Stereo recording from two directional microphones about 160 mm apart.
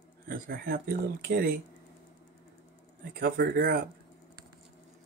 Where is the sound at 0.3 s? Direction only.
65° right (ahead or behind).